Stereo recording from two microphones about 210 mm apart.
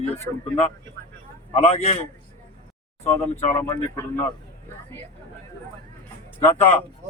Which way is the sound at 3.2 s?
10° left (ahead or behind).